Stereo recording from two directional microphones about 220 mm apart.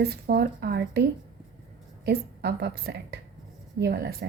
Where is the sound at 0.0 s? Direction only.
45° right (ahead or behind).